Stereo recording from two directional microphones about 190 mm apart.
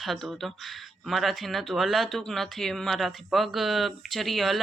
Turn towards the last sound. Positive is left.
turn(degrees=0)  # may be behind; listen again after turning